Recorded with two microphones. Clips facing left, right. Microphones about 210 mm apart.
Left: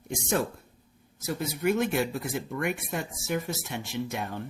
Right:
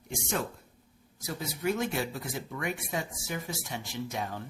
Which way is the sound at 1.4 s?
60° left (ahead or behind).